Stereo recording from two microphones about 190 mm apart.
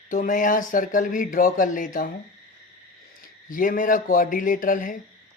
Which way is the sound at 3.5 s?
45° left (ahead or behind).